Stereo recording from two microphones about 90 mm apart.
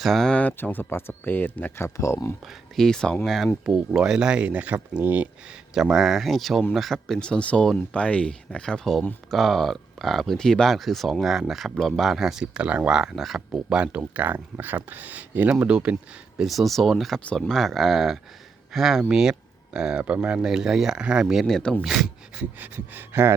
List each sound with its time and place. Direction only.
0.0 s speech: 5° left (ahead or behind); by 2.3 s 35° left (ahead or behind)
2.5 s speech: 5° left (ahead or behind); by 5.5 s 15° right (ahead or behind)
5.7 s speech: 5° right (ahead or behind)
16.4 s speech: centre (ahead or behind)
17.2 s speech: 10° left (ahead or behind); by 21.4 s 10° right (ahead or behind)
21.4 s speech: 5° left (ahead or behind)
22.5 s speech: 20° right (ahead or behind)